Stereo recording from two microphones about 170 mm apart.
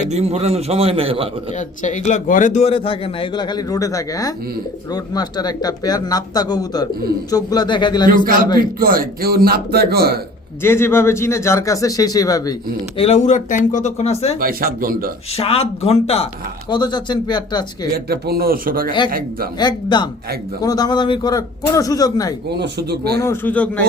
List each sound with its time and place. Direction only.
0.1 s a man's voice: 40° right (ahead or behind)
1.5 s a man's voice: 45° left (ahead or behind); by 8.2 s 25° left (ahead or behind)
8.2 s speech: 55° right (ahead or behind)
10.6 s speech: 15° left (ahead or behind)
13.0 s speech: 40° left (ahead or behind)
14.3 s speech: 55° right (ahead or behind)
15.4 s a man's voice: 35° left (ahead or behind)
17.9 s speech: 65° right (ahead or behind)
19.5 s speech: 25° left (ahead or behind)
22.4 s speech: 75° right (ahead or behind)
23.2 s speech: 15° left (ahead or behind)